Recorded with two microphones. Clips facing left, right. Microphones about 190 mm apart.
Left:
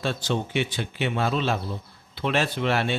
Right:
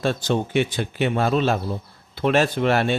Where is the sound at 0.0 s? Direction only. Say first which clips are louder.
Right 5 dB; 45° right (ahead or behind).